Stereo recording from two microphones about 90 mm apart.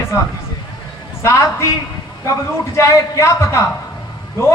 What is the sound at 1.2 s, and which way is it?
Speech, 35° left (ahead or behind).